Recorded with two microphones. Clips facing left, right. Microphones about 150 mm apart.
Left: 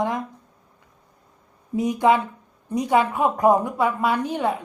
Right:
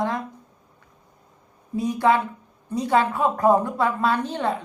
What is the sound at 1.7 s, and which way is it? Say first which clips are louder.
A woman's voice: left 1 dB; 15° left (ahead or behind).